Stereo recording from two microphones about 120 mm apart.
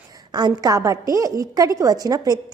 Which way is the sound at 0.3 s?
35° right (ahead or behind).